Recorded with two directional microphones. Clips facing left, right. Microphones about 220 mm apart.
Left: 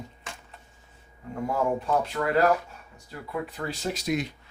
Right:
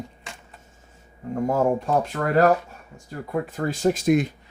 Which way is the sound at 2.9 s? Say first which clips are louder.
Right 6 dB; 45° right (ahead or behind).